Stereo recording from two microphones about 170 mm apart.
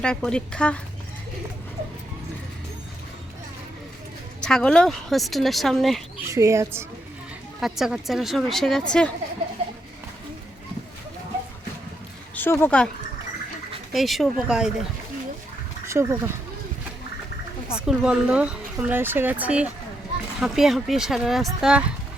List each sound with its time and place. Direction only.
0.0 s speech: 5° left (ahead or behind)
4.4 s speech: 5° left (ahead or behind)
6.2 s speech: 15° right (ahead or behind)
7.6 s speech: 5° right (ahead or behind)
12.3 s speech: 15° left (ahead or behind)
13.9 s speech: centre (ahead or behind)
15.9 s speech: 15° right (ahead or behind)
17.7 s speech: 5° right (ahead or behind)